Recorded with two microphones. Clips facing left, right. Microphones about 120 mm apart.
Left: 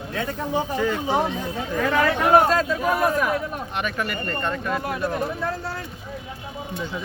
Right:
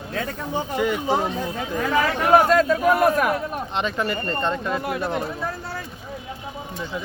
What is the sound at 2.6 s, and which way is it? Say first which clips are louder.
Speech: right 4 dB; 60° right (ahead or behind).